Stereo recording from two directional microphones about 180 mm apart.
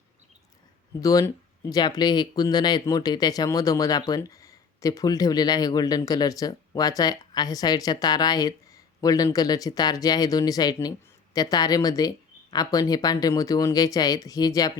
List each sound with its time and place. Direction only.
1.0 s speech: 20° left (ahead or behind)